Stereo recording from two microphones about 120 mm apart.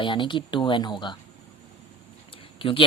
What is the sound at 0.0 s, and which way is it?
Speech, 45° left (ahead or behind).